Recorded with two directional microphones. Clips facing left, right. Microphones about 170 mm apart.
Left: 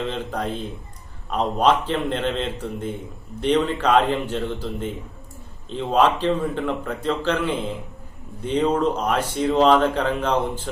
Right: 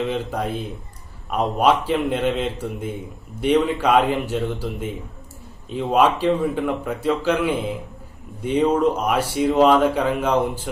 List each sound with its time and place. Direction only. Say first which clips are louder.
0.1 s speech: right 2 dB; 10° right (ahead or behind)